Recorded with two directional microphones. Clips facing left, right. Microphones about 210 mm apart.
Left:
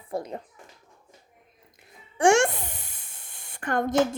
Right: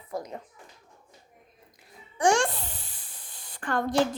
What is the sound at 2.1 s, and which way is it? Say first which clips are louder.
Music: left 4 dB; 25° left (ahead or behind).